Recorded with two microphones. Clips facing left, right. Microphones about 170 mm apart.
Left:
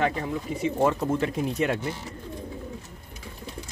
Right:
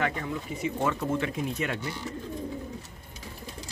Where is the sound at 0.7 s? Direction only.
35° left (ahead or behind).